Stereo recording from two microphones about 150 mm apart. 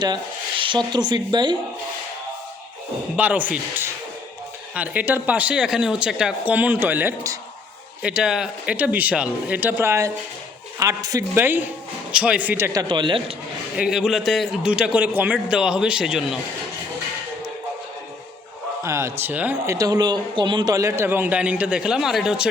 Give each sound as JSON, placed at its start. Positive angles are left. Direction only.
{"t": 0.0, "sound": "speech", "side_deg": -30}
{"t": 3.2, "sound": "a man's voice", "side_deg": -10}
{"t": 12.9, "sound": "speech", "side_deg": -30}
{"t": 13.7, "sound": "a man's voice", "side_deg": -5}
{"t": 18.8, "sound": "a man's voice", "side_deg": -20}
{"t": 19.7, "sound": "a man's voice", "side_deg": -25}